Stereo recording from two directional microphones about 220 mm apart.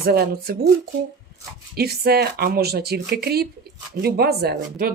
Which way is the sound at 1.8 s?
45° right (ahead or behind).